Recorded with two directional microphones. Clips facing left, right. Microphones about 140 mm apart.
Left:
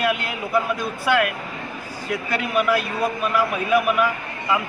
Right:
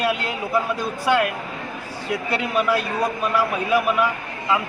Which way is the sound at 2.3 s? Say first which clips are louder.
Left 1 dB; 25° right (ahead or behind).